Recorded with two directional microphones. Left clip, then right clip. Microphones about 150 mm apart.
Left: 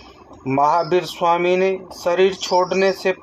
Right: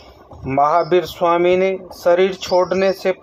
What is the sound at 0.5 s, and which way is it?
Speech, 35° right (ahead or behind).